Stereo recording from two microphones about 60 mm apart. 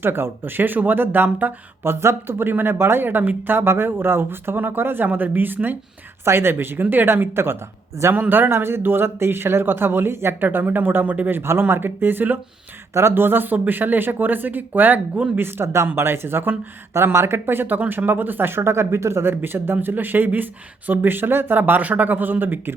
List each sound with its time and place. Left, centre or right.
0.0 s speech: right
12.9 s speech: right
15.4 s speech: right
16.9 s speech: right